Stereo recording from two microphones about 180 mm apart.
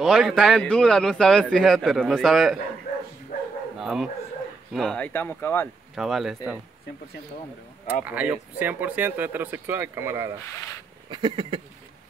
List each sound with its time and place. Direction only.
0.0 s a man's voice: centre (ahead or behind)
3.8 s a man's voice: centre (ahead or behind)
5.9 s a man's voice: centre (ahead or behind)
7.8 s speech: 10° right (ahead or behind)
11.1 s a sound: 25° right (ahead or behind)